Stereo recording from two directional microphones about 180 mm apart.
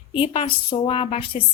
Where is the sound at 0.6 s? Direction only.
30° left (ahead or behind).